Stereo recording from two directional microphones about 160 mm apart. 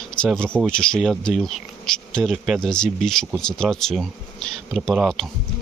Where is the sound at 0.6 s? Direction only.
5° left (ahead or behind).